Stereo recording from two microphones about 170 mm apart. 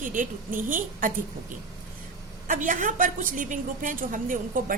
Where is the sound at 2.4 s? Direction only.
50° right (ahead or behind).